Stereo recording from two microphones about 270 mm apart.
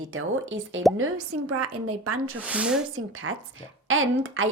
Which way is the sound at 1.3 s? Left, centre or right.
Right.